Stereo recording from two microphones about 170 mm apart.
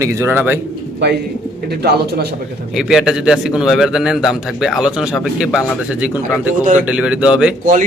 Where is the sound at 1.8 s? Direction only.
70° right (ahead or behind).